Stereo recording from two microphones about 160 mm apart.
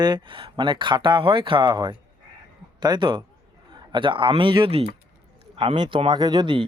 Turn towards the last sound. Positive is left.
turn(degrees=-30)  # may be behind; listen again after turning